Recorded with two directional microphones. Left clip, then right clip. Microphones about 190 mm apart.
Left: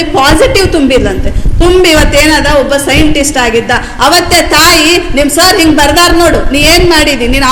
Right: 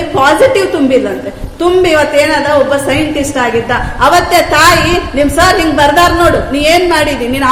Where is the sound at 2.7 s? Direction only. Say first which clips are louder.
Left 3 dB; 30° left (ahead or behind).